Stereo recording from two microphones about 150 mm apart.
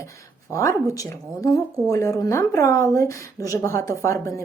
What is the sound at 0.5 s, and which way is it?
Speech, 20° left (ahead or behind).